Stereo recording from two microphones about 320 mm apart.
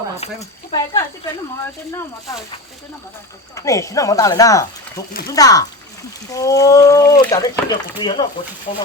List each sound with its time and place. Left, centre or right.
0.2 s speech: centre
3.5 s speech: centre